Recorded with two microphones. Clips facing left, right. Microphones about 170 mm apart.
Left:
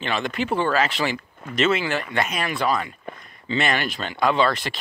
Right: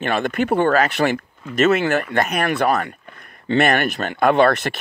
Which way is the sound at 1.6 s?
45° right (ahead or behind).